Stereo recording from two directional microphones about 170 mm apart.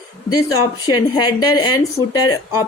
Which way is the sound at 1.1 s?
25° left (ahead or behind).